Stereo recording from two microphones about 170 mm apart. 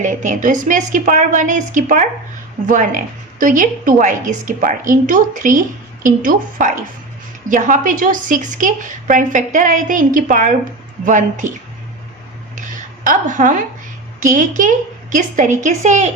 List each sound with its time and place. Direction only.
0.0 s a woman's voice: 50° right (ahead or behind)
12.5 s a sound: 50° right (ahead or behind)
14.2 s a woman's voice: 50° right (ahead or behind)